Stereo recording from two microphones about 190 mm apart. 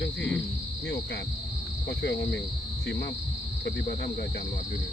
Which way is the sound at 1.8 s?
60° left (ahead or behind).